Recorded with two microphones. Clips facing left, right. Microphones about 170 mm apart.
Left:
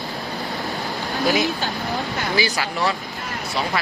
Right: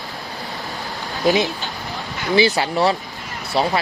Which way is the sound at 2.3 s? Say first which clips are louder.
Right 9 dB; 30° right (ahead or behind).